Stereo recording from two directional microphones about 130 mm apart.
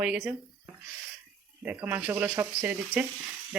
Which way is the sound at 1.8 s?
15° right (ahead or behind).